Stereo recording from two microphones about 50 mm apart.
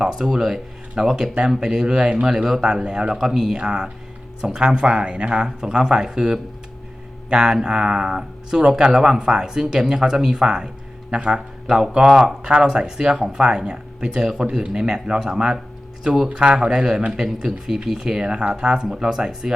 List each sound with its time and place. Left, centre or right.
0.2 s speech: centre